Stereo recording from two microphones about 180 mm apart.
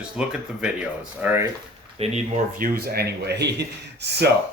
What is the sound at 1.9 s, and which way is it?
Speech, 35° right (ahead or behind).